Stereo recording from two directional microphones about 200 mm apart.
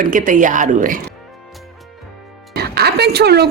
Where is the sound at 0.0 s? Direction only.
40° right (ahead or behind).